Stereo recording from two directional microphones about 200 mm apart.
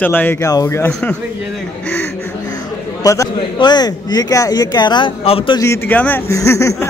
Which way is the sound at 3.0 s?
15° left (ahead or behind).